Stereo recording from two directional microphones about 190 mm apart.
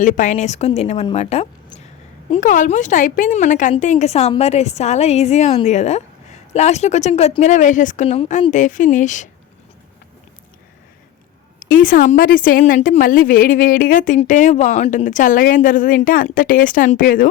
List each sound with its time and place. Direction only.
0.0 s speech: 40° left (ahead or behind)
11.6 s a woman's voice: 45° left (ahead or behind)